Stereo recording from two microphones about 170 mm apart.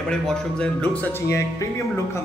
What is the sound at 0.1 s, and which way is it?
A man's voice, 5° left (ahead or behind).